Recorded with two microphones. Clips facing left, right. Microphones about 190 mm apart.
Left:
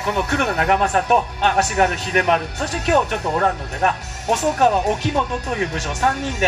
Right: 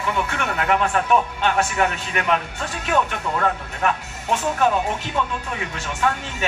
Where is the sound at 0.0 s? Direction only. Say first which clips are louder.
Left 4 dB; 40° left (ahead or behind).